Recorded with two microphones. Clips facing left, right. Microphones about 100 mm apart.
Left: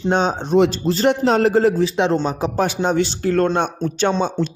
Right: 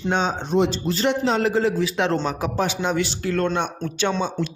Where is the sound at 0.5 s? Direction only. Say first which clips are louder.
Left 5 dB; 60° left (ahead or behind).